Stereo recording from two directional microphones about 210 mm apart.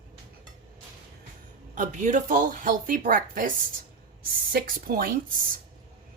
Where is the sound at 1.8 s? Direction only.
35° right (ahead or behind).